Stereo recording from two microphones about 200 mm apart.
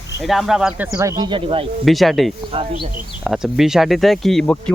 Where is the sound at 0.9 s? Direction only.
15° right (ahead or behind).